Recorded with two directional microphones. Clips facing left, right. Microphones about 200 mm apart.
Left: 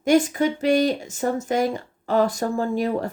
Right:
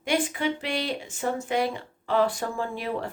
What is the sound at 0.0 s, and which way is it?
A woman's voice, 45° left (ahead or behind).